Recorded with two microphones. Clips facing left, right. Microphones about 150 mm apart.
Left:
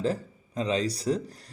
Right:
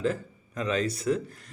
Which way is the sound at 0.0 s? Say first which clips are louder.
Even; 30° left (ahead or behind).